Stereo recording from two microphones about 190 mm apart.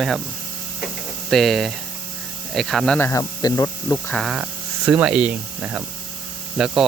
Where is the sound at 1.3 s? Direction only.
Centre (ahead or behind); by 4.0 s 20° left (ahead or behind).